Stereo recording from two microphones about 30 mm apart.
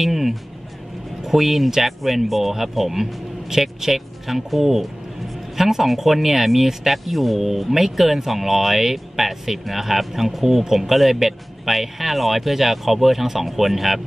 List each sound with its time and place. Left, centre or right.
0.0 s music: centre
1.2 s speech: centre